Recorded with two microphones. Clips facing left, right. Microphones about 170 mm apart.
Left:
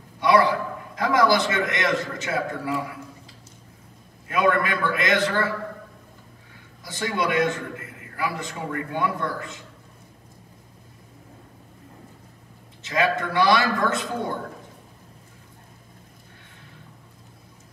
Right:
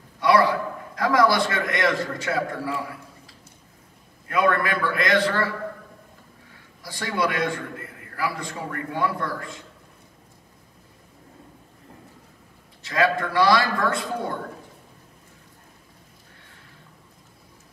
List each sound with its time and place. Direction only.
0.2 s a sound: 25° left (ahead or behind)
0.9 s a man's voice: 20° left (ahead or behind)
4.3 s a man's voice: 20° left (ahead or behind)
6.8 s a man's voice: 20° left (ahead or behind)
12.8 s a man's voice: 20° left (ahead or behind)